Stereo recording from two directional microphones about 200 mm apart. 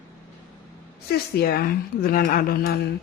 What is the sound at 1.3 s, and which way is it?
A woman's voice, 50° left (ahead or behind).